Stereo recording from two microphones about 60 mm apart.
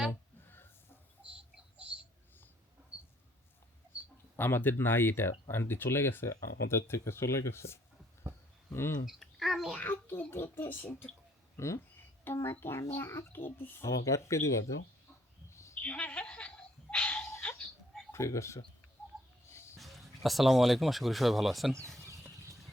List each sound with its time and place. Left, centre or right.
0.1 s a sound: left
1.2 s bird: right
4.4 s speech: left
9.0 s speech: centre
9.7 s a child's voice: left
11.5 s speech: left
12.2 s speech: left
13.8 s speech: left
15.4 s a sound: left
15.8 s a sound: left
18.1 s speech: left
19.8 s speech: centre